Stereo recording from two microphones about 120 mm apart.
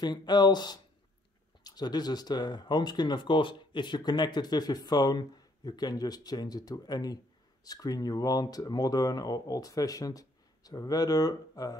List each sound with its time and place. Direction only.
0.0 s speech: 35° left (ahead or behind)